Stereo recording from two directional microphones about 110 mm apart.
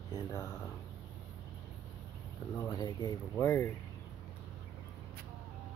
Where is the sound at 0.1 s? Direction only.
30° left (ahead or behind).